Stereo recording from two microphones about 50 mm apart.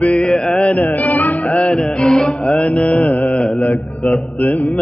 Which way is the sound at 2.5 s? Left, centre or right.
Left.